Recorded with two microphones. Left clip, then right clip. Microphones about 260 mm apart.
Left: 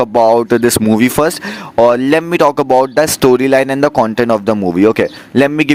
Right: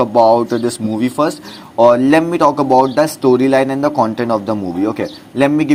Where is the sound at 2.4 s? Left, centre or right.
Left.